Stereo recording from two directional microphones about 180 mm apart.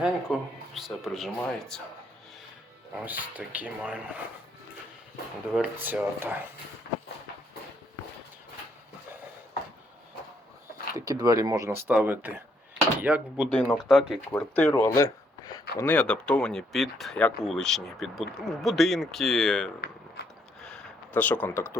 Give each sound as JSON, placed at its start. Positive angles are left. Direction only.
{"t": 0.0, "sound": "speech", "side_deg": 0}
{"t": 2.9, "sound": "speech", "side_deg": -10}
{"t": 5.5, "sound": "speech", "side_deg": -10}
{"t": 10.9, "sound": "speech", "side_deg": -20}
{"t": 13.5, "sound": "speech", "side_deg": 5}
{"t": 14.8, "sound": "a sound", "side_deg": 15}
{"t": 15.8, "sound": "speech", "side_deg": 10}
{"t": 20.2, "sound": "a sound", "side_deg": 60}
{"t": 20.6, "sound": "a sound", "side_deg": 5}